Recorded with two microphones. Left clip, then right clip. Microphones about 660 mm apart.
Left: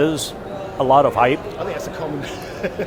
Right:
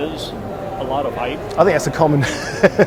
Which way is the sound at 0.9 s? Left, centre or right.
Left.